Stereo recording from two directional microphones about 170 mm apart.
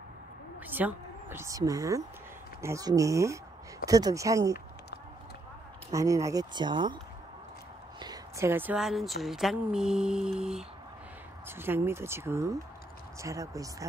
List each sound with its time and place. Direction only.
0.7 s speech: 10° right (ahead or behind)
5.9 s speech: 20° right (ahead or behind)
8.0 s speech: 20° right (ahead or behind)